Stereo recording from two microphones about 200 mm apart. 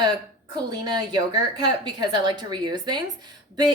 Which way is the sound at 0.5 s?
20° right (ahead or behind).